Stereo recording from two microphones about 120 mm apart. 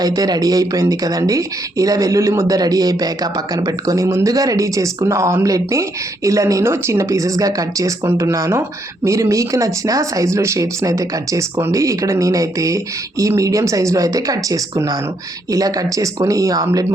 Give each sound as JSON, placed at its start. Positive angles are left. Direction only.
{"t": 0.0, "sound": "speech", "side_deg": -30}